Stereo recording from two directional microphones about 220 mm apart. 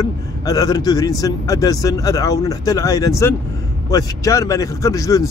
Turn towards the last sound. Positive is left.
turn(degrees=15)  # may be behind; listen again after turning